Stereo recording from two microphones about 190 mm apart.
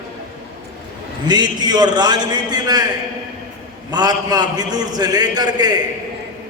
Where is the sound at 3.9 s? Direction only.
20° right (ahead or behind).